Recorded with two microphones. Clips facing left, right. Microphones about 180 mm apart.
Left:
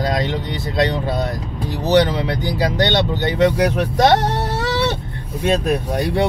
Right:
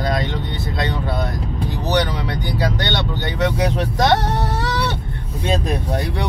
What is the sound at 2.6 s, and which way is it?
Speech, 20° left (ahead or behind).